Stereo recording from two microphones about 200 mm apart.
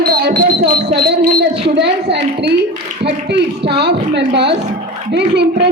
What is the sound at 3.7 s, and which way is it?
A man's voice, 55° right (ahead or behind).